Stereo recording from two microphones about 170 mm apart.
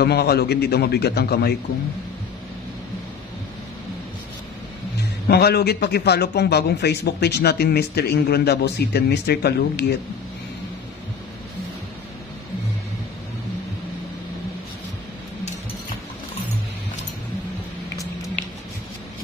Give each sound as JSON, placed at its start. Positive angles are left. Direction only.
{"t": 0.0, "sound": "a man's voice", "side_deg": 70}
{"t": 5.3, "sound": "a man's voice", "side_deg": 70}